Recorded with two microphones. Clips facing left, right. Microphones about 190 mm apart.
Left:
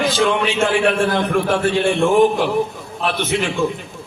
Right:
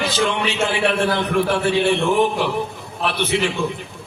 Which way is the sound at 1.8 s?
50° left (ahead or behind).